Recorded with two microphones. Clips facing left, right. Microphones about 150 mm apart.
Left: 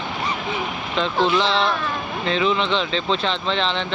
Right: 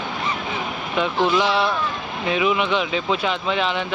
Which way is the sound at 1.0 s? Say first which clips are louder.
Even; 10° right (ahead or behind).